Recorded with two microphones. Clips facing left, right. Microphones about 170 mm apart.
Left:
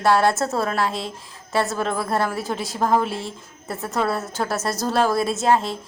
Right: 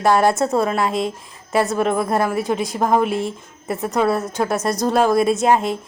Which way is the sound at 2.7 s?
15° right (ahead or behind).